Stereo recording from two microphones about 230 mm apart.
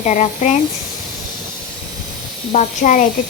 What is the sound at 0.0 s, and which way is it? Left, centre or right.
Speech, left.